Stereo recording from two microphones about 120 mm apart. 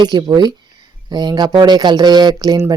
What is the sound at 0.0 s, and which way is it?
Speech, 35° right (ahead or behind).